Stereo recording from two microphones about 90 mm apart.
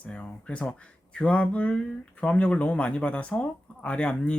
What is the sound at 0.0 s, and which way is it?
Speech, 15° left (ahead or behind).